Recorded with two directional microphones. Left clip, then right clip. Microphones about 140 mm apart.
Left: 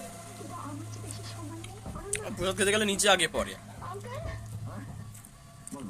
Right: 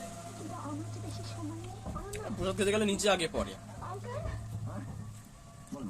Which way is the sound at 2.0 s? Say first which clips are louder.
Left 4 dB; 5° left (ahead or behind).